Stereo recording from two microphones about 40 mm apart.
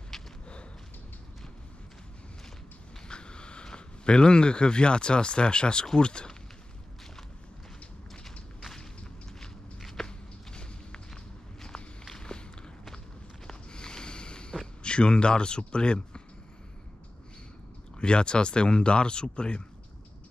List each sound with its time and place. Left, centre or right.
0.1 s walk: centre
3.1 s speech: left
9.4 s walk: centre
10.0 s walk: left
12.0 s walk: centre
13.5 s a sound: centre
14.8 s a man's voice: left
17.9 s speech: left